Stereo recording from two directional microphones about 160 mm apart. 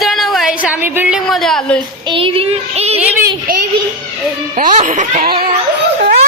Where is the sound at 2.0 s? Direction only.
35° right (ahead or behind).